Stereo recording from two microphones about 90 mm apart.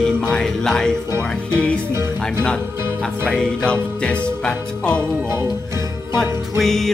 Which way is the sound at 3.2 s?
10° left (ahead or behind).